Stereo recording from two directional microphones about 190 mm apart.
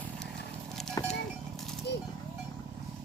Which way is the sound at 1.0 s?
15° left (ahead or behind).